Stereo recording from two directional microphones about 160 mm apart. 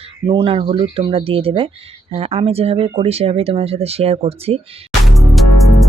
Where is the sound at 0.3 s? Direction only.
35° right (ahead or behind).